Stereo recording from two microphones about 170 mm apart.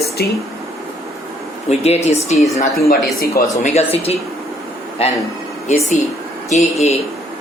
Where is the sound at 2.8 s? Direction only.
60° left (ahead or behind).